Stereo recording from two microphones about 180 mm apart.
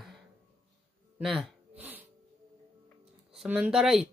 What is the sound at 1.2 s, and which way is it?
Gasp, centre (ahead or behind).